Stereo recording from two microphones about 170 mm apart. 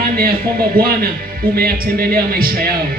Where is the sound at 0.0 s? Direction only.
60° right (ahead or behind).